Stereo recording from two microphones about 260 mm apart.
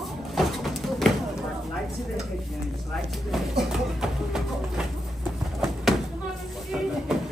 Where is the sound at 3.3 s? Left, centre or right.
Centre.